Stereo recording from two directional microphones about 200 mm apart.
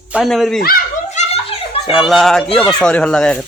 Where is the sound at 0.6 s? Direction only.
45° left (ahead or behind).